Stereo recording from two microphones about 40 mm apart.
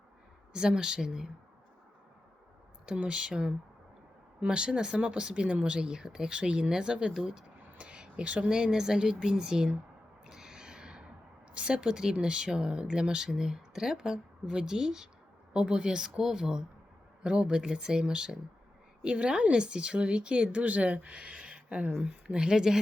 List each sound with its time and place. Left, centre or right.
0.5 s speech: centre
2.8 s speech: right
7.6 s a sound: right
8.4 s speech: centre
10.2 s a sound: centre
11.5 s speech: right
22.3 s speech: centre